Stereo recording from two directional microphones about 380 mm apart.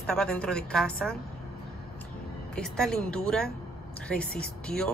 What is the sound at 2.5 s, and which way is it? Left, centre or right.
Speech, centre.